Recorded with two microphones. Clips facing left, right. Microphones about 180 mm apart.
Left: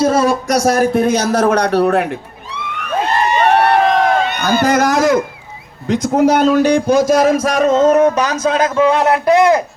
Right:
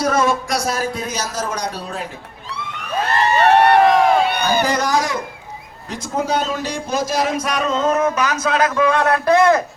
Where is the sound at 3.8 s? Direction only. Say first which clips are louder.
Even; 10° right (ahead or behind).